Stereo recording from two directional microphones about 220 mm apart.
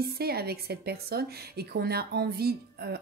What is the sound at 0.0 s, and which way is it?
A woman's voice, 45° right (ahead or behind).